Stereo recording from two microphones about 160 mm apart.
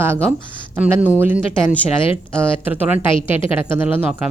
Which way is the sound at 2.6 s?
10° right (ahead or behind).